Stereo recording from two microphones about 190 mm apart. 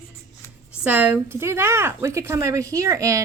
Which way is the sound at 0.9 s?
10° right (ahead or behind).